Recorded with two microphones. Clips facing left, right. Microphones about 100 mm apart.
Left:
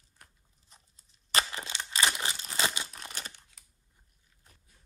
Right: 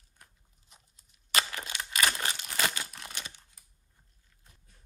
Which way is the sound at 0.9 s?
35° left (ahead or behind).